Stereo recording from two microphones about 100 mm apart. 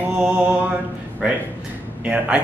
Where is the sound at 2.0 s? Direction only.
10° right (ahead or behind).